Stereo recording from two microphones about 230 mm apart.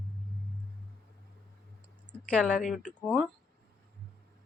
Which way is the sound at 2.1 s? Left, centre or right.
Centre.